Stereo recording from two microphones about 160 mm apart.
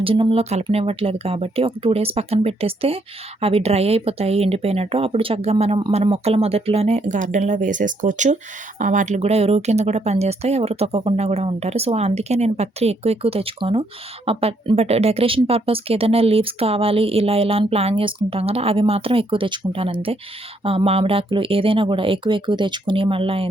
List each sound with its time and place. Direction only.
0.0 s speech: 35° right (ahead or behind)